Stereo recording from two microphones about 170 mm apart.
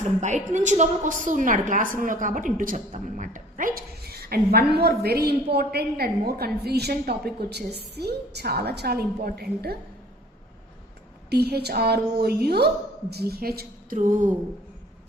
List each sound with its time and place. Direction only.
0.2 s a woman's voice: 45° right (ahead or behind); by 9.7 s 65° right (ahead or behind)
11.3 s a woman's voice: 70° right (ahead or behind); by 14.3 s 50° right (ahead or behind)